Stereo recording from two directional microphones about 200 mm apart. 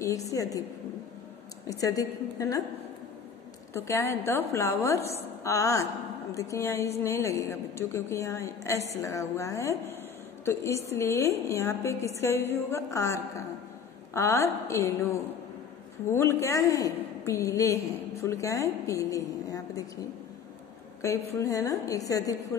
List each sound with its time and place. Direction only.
0.0 s a woman's voice: 15° left (ahead or behind)
1.7 s a woman's voice: 15° left (ahead or behind)
3.7 s a woman's voice: 15° left (ahead or behind)
21.0 s a woman's voice: 15° left (ahead or behind)